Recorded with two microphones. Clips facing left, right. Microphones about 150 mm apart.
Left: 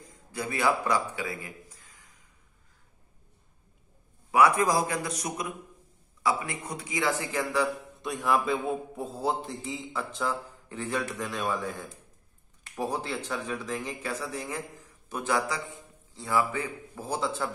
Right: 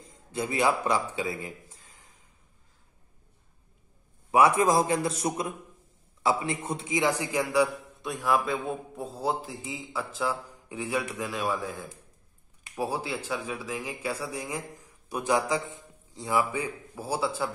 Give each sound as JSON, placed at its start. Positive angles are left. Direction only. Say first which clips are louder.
{"t": 0.0, "sound": "a man's voice", "louder": "right 3 dB", "side_deg": -25}
{"t": 4.3, "sound": "a man's voice", "louder": "right 1 dB", "side_deg": -25}
{"t": 8.0, "sound": "a man's voice", "louder": "even", "side_deg": 0}